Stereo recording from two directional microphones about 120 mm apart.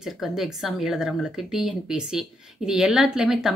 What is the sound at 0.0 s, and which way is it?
A woman's voice, 5° right (ahead or behind).